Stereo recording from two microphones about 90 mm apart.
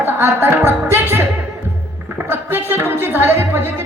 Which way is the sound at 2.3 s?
25° right (ahead or behind).